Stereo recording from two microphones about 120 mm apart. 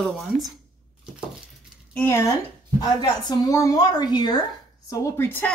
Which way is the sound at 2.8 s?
35° left (ahead or behind).